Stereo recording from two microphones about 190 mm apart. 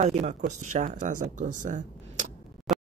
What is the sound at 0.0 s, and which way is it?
Speech, 35° right (ahead or behind).